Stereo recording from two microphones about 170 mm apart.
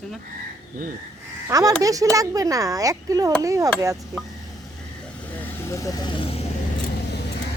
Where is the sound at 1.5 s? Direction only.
20° right (ahead or behind).